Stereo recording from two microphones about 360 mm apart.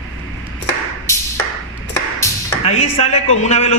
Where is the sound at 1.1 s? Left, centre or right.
Centre.